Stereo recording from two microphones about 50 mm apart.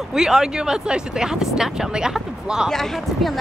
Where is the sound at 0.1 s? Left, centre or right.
Centre.